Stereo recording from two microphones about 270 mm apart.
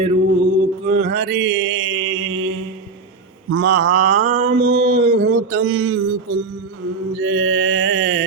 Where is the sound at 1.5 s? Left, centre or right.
Right.